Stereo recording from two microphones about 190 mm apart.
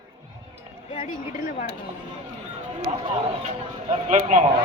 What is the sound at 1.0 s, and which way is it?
Speech, 45° left (ahead or behind).